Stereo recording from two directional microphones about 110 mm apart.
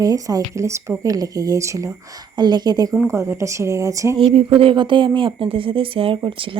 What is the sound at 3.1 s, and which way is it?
Speech, 25° right (ahead or behind).